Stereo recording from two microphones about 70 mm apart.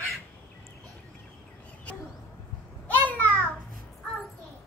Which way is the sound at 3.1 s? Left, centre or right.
Left.